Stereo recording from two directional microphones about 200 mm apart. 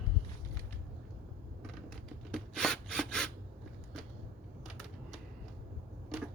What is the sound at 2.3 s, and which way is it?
Rub, centre (ahead or behind).